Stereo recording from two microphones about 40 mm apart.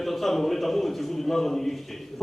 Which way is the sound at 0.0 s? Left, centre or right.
Centre.